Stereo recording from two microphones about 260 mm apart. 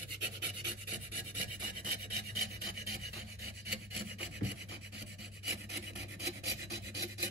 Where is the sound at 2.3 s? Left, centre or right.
Right.